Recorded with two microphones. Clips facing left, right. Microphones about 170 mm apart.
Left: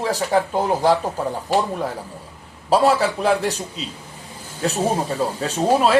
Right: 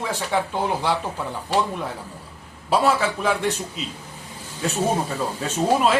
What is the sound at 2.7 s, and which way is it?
Speech, 35° left (ahead or behind).